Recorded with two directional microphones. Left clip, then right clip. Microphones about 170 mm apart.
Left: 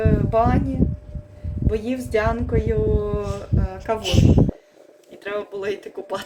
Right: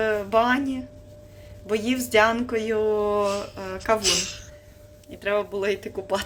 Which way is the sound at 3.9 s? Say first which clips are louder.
Right 1 dB; 15° left (ahead or behind).